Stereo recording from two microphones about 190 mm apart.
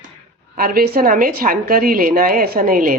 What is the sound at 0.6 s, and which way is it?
A woman's voice, 50° right (ahead or behind).